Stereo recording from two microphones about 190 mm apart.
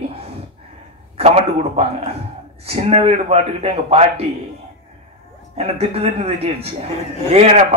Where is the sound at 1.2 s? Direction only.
35° right (ahead or behind).